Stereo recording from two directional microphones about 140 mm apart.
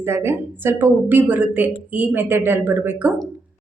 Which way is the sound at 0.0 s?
15° right (ahead or behind).